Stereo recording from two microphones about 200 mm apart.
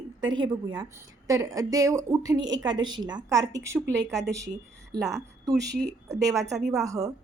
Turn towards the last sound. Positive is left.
turn(degrees=-15)  # may be behind; listen again after turning